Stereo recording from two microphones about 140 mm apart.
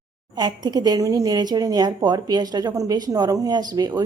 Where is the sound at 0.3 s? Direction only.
30° right (ahead or behind).